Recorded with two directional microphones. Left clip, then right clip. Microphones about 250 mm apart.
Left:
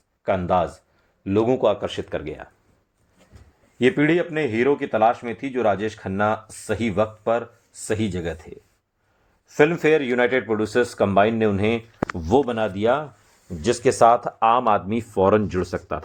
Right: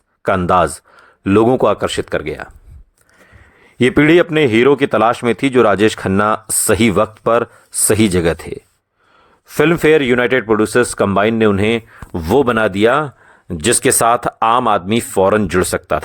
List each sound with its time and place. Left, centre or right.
0.3 s speech: right
3.8 s speech: right